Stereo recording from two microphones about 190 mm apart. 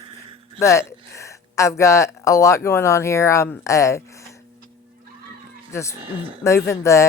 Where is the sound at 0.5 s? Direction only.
15° left (ahead or behind).